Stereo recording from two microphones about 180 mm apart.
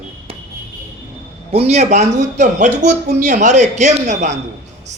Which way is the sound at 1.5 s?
35° right (ahead or behind).